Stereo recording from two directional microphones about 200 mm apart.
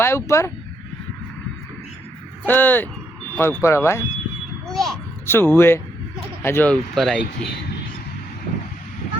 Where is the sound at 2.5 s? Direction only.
10° left (ahead or behind).